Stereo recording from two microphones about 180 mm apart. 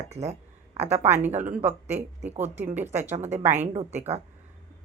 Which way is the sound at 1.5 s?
40° right (ahead or behind).